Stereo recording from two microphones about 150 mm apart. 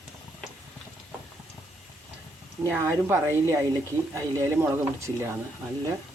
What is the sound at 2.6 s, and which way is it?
A woman's voice, 15° right (ahead or behind).